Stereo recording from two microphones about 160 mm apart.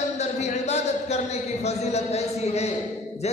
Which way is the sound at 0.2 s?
45° left (ahead or behind).